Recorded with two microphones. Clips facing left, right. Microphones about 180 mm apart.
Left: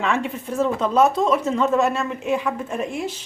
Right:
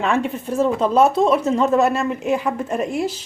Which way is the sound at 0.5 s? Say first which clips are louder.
Right 3 dB; 35° right (ahead or behind).